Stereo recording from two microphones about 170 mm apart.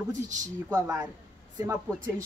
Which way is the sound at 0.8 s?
20° right (ahead or behind).